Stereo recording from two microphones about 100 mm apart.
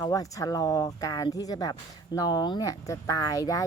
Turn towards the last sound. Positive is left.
turn(degrees=35)  # may be behind; listen again after turning